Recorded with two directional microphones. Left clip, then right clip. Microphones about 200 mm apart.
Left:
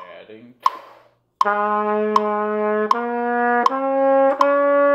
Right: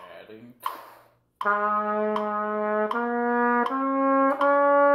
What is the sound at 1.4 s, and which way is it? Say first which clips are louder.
Brass instrument: left 5 dB; 35° left (ahead or behind).